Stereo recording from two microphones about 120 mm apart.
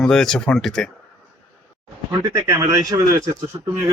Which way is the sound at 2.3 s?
25° right (ahead or behind).